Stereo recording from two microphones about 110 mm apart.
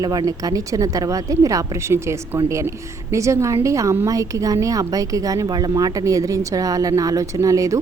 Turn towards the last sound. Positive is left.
turn(degrees=-30)  # may be behind; listen again after turning